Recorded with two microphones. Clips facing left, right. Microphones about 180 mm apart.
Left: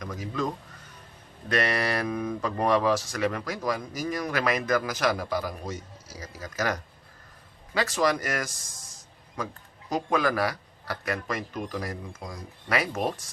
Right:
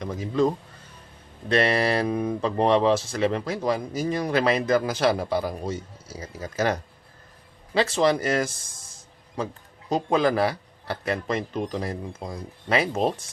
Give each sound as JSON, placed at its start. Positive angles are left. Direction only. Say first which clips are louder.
{"t": 0.0, "sound": "speech", "louder": "right 8 dB", "side_deg": -30}